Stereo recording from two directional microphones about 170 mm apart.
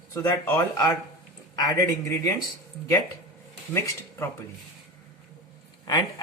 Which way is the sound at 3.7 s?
15° left (ahead or behind).